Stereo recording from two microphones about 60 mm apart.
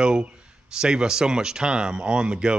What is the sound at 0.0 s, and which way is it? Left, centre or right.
Speech, centre.